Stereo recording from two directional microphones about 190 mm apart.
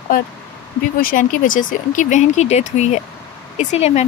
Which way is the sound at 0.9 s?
45° left (ahead or behind).